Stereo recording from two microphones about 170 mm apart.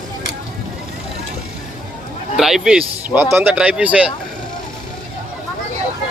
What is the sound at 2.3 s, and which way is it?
Speech, centre (ahead or behind).